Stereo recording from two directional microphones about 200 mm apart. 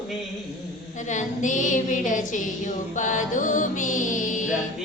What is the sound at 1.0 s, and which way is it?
Music, 40° left (ahead or behind).